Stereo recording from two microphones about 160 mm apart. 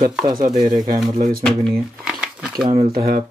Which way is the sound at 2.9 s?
70° right (ahead or behind).